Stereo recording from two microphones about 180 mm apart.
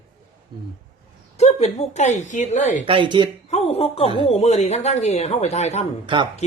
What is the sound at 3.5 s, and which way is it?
Speech, 35° left (ahead or behind).